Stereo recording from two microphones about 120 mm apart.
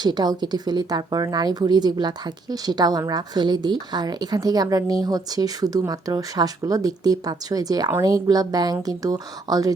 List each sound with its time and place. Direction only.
0.0 s speech: 35° right (ahead or behind)